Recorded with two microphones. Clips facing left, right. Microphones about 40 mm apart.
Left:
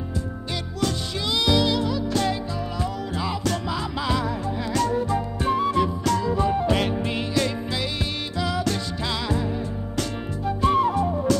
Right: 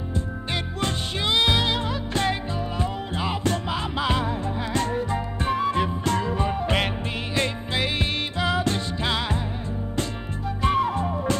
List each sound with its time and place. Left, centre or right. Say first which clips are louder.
0.7 s music: left 4 dB; right
10.6 s music: left 2 dB; right